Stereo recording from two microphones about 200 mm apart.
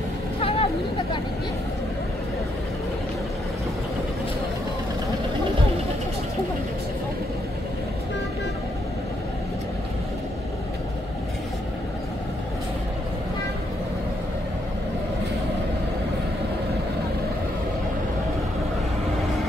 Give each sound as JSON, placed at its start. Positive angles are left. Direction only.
{"t": 0.4, "sound": "vehicle", "side_deg": 30}